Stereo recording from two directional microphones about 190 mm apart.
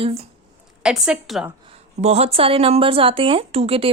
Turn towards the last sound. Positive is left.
turn(degrees=-30)  # may be behind; listen again after turning